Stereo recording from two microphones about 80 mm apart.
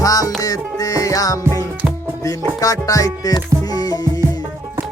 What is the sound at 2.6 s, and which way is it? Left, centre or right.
Music, left.